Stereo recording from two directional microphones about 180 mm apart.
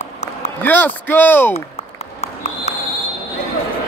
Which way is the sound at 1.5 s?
35° left (ahead or behind).